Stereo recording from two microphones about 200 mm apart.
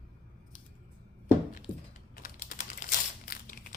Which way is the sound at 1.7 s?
40° left (ahead or behind).